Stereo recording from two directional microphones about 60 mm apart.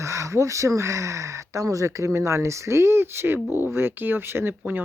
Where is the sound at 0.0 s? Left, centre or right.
Right.